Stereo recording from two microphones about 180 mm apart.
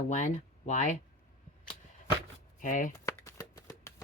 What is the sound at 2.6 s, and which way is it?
Chopping, 45° left (ahead or behind).